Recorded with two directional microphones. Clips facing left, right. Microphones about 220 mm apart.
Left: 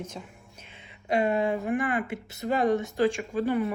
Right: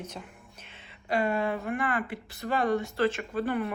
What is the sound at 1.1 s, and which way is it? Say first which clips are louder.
A woman's voice: left 3 dB; 20° left (ahead or behind).